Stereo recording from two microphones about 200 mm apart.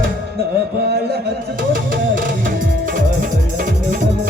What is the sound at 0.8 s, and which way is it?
Music, 50° right (ahead or behind).